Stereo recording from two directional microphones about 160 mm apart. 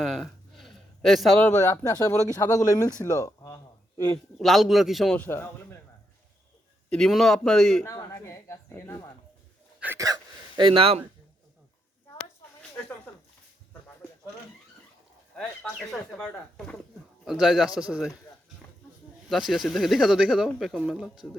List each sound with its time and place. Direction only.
0.0 s a sound: centre (ahead or behind)
1.5 s speech: 20° left (ahead or behind)
4.4 s speech: centre (ahead or behind)
6.9 s speech: centre (ahead or behind)
7.9 s a sound: 20° left (ahead or behind)
9.8 s hiccup: 10° right (ahead or behind)
10.6 s speech: 35° right (ahead or behind)
15.9 s speech: 5° left (ahead or behind)
19.3 s speech: centre (ahead or behind)